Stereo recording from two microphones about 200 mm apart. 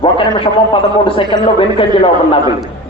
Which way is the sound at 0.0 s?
25° left (ahead or behind).